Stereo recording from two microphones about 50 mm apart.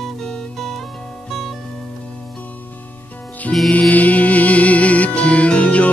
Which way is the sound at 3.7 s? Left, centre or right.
Left.